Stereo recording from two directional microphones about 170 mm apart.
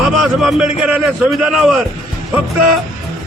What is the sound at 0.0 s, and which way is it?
A man's voice, 5° right (ahead or behind).